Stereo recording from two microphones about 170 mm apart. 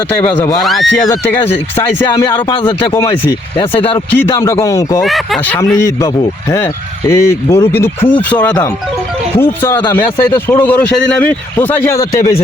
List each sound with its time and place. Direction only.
0.1 s speech: 10° left (ahead or behind)
0.6 s speech: centre (ahead or behind)
1.3 s speech: 10° left (ahead or behind)
3.7 s speech: 10° left (ahead or behind)
5.0 s speech: centre (ahead or behind)
5.5 s speech: 15° left (ahead or behind)
7.1 s speech: 15° left (ahead or behind)